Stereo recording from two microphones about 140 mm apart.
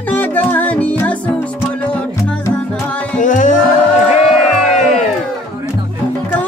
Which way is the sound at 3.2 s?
65° left (ahead or behind).